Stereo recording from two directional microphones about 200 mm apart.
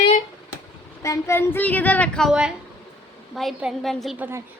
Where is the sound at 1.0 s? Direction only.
15° left (ahead or behind).